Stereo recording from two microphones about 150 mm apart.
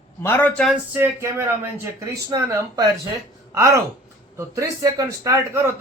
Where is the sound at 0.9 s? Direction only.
15° right (ahead or behind).